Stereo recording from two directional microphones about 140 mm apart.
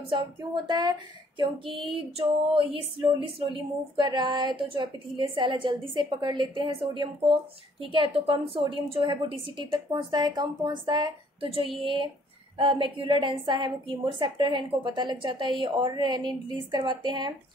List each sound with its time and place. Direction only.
0.7 s a woman's voice: 30° right (ahead or behind)